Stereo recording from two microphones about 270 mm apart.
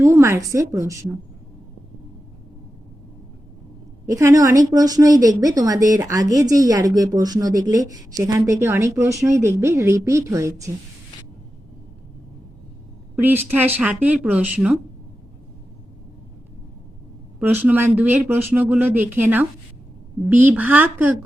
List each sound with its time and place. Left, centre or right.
0.0 s speech: centre
4.1 s speech: centre
13.1 s speech: centre
17.4 s speech: centre